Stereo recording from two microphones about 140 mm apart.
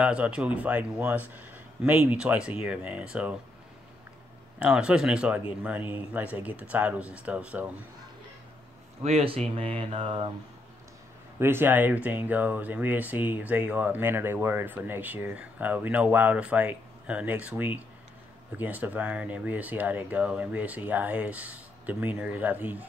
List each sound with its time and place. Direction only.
0.0 s speech: 10° right (ahead or behind)
4.6 s speech: 5° right (ahead or behind)
9.0 s speech: 45° right (ahead or behind)
9.6 s mantra: 40° right (ahead or behind)
11.3 s speech: 15° right (ahead or behind)